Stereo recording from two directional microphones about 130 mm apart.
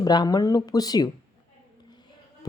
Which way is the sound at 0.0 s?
30° left (ahead or behind).